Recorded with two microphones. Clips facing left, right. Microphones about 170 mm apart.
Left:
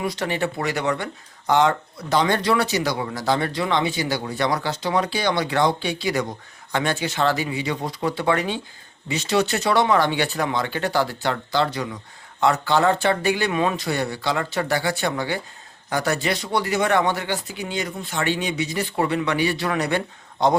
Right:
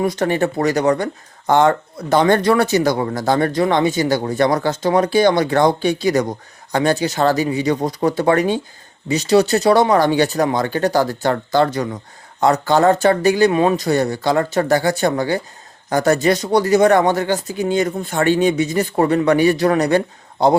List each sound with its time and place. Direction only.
0.0 s speech: 45° right (ahead or behind)